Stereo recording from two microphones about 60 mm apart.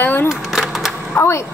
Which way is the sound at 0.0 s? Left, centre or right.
Left.